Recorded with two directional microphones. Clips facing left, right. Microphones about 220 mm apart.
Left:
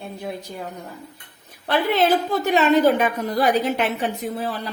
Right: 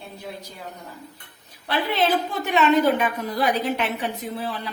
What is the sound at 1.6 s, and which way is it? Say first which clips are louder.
A woman's voice: left 4 dB; 45° left (ahead or behind).